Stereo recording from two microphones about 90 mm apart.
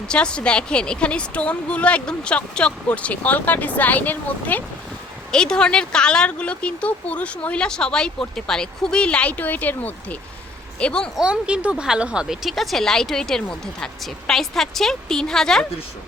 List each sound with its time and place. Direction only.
0.1 s speech: 10° left (ahead or behind)
5.3 s speech: 10° left (ahead or behind)
11.2 s speech: 10° right (ahead or behind); by 15.6 s 5° left (ahead or behind)